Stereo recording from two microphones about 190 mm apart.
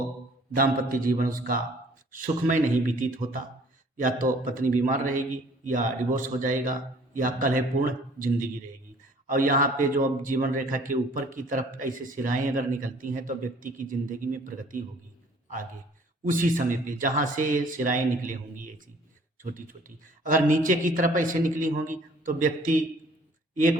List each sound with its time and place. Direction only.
0.5 s a man's voice: 45° right (ahead or behind)
16.3 s a man's voice: 45° right (ahead or behind)